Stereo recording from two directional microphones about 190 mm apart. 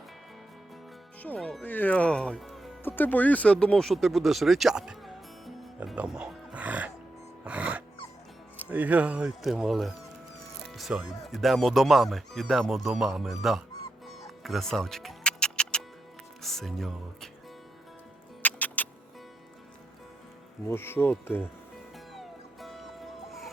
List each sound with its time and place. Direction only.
1.2 s speech: 5° left (ahead or behind)
7.4 s music: 5° right (ahead or behind)
8.5 s speech: 10° right (ahead or behind)
14.4 s music: centre (ahead or behind)
16.4 s speech: centre (ahead or behind)
18.4 s music: 10° left (ahead or behind)
20.7 s insect: 10° left (ahead or behind)
21.9 s music: centre (ahead or behind)